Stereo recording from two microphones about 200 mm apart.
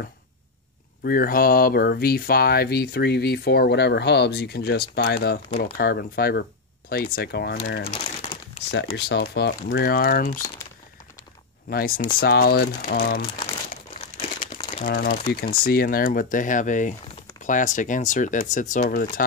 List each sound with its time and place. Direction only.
1.0 s speech: 45° left (ahead or behind)
7.9 s crumpling: 25° left (ahead or behind)
8.9 s speech: 55° left (ahead or behind)
11.7 s speech: 50° left (ahead or behind)
14.6 s crumpling: 30° left (ahead or behind)
14.9 s speech: 50° left (ahead or behind)